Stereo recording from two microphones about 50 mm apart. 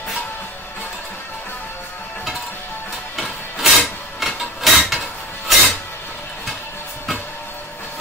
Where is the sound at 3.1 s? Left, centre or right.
Centre.